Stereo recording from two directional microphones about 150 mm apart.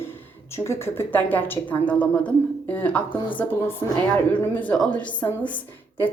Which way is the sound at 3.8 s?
25° left (ahead or behind).